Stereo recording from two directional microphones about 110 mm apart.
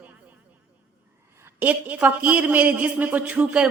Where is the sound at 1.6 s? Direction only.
15° right (ahead or behind).